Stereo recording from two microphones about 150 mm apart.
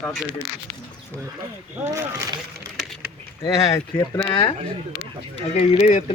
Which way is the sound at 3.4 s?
25° left (ahead or behind).